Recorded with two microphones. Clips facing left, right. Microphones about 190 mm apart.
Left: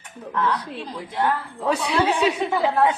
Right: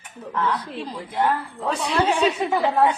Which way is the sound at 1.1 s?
5° right (ahead or behind).